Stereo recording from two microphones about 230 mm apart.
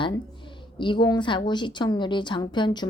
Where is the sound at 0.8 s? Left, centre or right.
Left.